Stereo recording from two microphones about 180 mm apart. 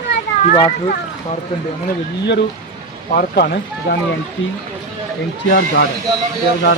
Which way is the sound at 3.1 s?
55° left (ahead or behind).